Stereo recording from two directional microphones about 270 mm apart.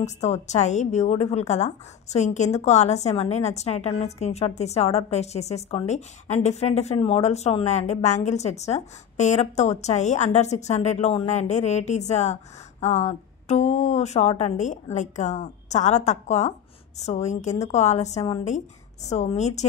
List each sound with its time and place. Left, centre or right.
0.0 s a woman's voice: left